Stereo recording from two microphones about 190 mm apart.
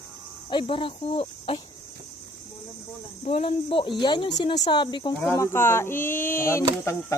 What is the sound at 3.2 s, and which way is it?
Speech, 30° left (ahead or behind).